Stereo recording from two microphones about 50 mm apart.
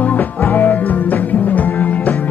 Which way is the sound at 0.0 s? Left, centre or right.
Left.